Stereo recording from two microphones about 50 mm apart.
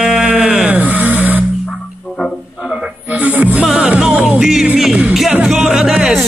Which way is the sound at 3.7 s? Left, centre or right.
Right.